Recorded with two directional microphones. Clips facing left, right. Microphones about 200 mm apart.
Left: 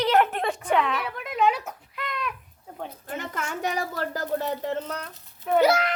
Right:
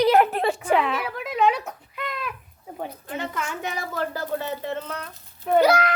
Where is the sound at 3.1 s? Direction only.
45° left (ahead or behind).